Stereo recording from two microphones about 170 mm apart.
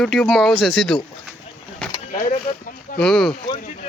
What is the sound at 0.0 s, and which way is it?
Speech, centre (ahead or behind).